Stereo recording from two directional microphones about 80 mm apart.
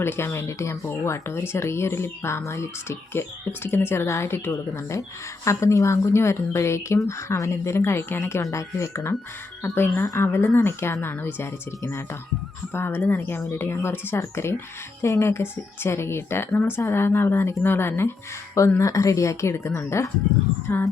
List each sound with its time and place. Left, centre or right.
0.0 s speech: left
8.4 s speech: left
18.8 s speech: left